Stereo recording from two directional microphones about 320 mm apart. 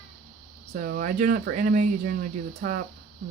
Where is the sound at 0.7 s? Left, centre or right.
Right.